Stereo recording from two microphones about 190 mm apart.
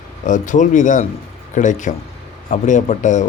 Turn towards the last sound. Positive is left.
turn(degrees=40)  # may be behind; listen again after turning